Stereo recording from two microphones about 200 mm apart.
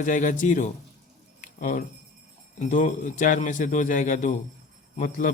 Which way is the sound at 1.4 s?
40° left (ahead or behind).